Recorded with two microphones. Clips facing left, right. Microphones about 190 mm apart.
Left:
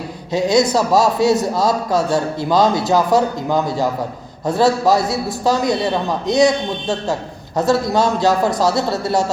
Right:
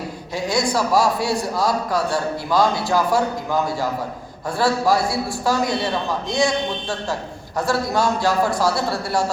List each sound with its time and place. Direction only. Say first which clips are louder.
0.3 s a man's voice: left 6 dB; 20° left (ahead or behind)
4.4 s a man's voice: left 4 dB; 20° left (ahead or behind)